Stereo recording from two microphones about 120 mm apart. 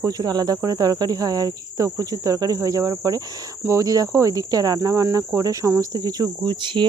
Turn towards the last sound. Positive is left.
turn(degrees=-40)  # may be behind; listen again after turning